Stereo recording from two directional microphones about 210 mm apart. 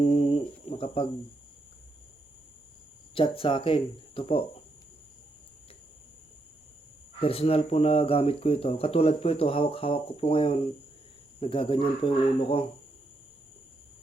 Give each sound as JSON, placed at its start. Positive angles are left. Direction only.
{"t": 0.0, "sound": "a sound", "side_deg": 30}
{"t": 3.2, "sound": "speech", "side_deg": 25}
{"t": 7.2, "sound": "speech", "side_deg": 25}